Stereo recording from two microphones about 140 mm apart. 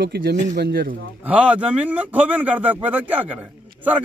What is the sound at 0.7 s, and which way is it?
Speech, 90° right.